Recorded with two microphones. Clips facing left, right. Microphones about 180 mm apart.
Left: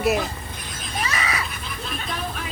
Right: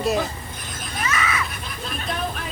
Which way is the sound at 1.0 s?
35° left (ahead or behind).